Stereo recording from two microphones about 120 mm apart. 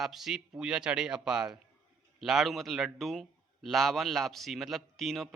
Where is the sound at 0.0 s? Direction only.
Centre (ahead or behind).